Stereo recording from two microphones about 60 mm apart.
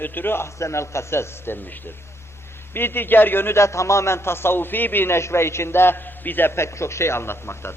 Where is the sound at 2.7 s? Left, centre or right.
Left.